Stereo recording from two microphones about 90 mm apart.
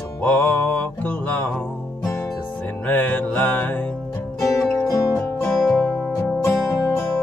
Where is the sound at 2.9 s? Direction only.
20° left (ahead or behind).